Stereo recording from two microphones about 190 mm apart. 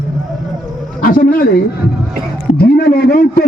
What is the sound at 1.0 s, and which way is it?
A man's voice, 50° left (ahead or behind).